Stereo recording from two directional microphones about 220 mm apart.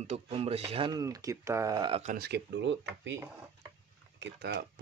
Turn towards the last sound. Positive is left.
turn(degrees=-45)  # may be behind; listen again after turning